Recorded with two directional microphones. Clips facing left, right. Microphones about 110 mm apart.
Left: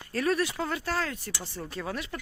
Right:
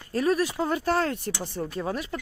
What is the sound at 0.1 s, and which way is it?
Speech, 15° right (ahead or behind).